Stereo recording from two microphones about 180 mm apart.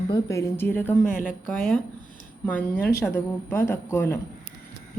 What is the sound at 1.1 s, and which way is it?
Speech, 45° left (ahead or behind).